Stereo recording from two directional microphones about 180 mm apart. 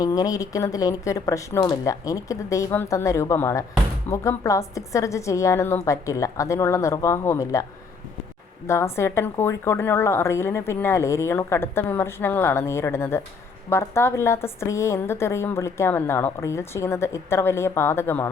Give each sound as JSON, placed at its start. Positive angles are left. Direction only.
{"t": 0.0, "sound": "a woman's voice", "side_deg": 20}